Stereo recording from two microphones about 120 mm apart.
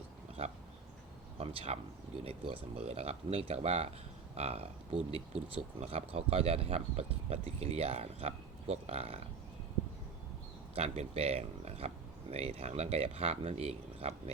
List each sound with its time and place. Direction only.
0.4 s speech: 50° right (ahead or behind)
10.8 s speech: 60° right (ahead or behind)